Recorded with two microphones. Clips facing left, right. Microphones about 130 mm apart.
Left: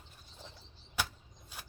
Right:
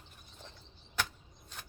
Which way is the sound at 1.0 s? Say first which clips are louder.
Even; 10° left (ahead or behind).